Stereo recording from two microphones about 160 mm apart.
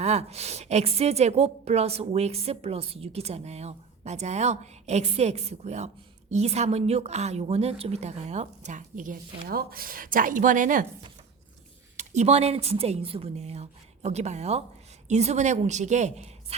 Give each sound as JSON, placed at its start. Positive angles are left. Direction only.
{"t": 0.0, "sound": "a woman's voice", "side_deg": -45}
{"t": 11.9, "sound": "a woman's voice", "side_deg": -45}